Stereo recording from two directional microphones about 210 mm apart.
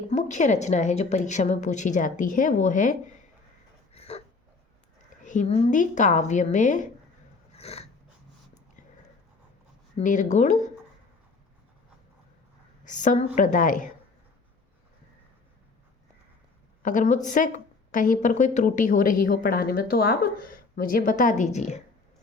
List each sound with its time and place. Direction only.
0.1 s a woman's voice: 35° left (ahead or behind)
3.9 s a sound: 30° left (ahead or behind)
5.2 s a woman's voice: 35° left (ahead or behind)
7.5 s a sound: 30° left (ahead or behind)
10.0 s a woman's voice: 35° left (ahead or behind)
12.8 s a woman's voice: 35° left (ahead or behind)
16.8 s a woman's voice: 35° left (ahead or behind)